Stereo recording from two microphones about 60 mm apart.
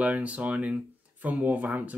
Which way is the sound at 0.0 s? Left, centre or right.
Right.